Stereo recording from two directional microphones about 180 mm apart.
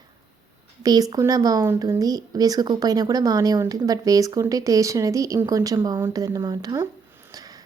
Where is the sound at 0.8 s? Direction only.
20° right (ahead or behind).